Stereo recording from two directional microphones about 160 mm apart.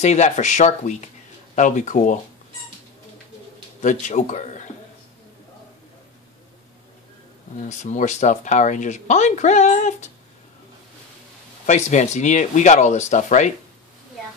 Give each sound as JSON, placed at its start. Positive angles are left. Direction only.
{"t": 0.0, "sound": "speech", "side_deg": 45}
{"t": 3.8, "sound": "speech", "side_deg": 50}
{"t": 7.6, "sound": "speech", "side_deg": 45}
{"t": 11.6, "sound": "speech", "side_deg": 50}